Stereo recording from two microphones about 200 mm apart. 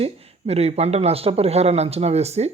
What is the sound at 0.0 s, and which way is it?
Speech, 30° right (ahead or behind).